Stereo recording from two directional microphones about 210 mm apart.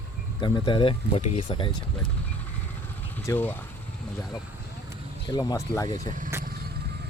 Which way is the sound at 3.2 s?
10° left (ahead or behind).